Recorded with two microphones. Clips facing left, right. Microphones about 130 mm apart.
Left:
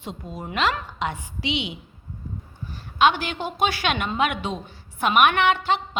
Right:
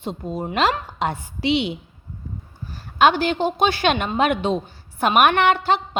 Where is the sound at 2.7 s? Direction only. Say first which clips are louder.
Right 3 dB; 35° right (ahead or behind).